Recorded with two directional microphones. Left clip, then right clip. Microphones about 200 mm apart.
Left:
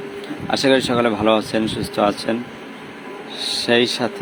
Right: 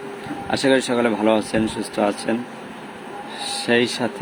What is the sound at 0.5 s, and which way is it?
Speech, 5° right (ahead or behind).